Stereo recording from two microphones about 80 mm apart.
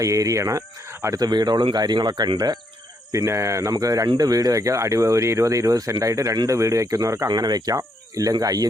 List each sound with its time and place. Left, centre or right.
0.0 s speech: right
1.2 s speech: right
3.1 s speech: right
7.3 s speech: right